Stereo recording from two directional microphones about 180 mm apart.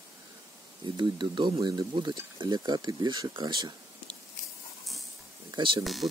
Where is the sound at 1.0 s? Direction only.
25° right (ahead or behind).